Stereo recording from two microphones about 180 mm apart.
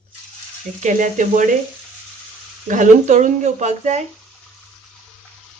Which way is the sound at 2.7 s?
45° right (ahead or behind).